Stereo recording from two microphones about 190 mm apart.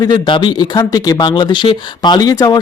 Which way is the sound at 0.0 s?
25° left (ahead or behind).